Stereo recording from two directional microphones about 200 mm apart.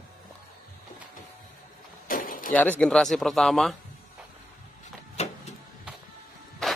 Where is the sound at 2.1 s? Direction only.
45° left (ahead or behind).